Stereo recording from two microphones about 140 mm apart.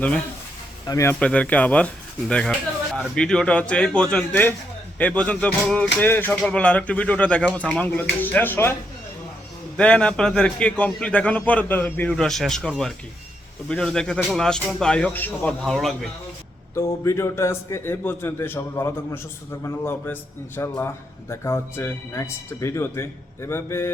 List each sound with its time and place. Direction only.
0.9 s speech: 20° left (ahead or behind)
1.2 s speech: 10° left (ahead or behind)
9.7 s speech: 5° left (ahead or behind)
12.1 s speech: centre (ahead or behind)
16.7 s speech: 20° left (ahead or behind)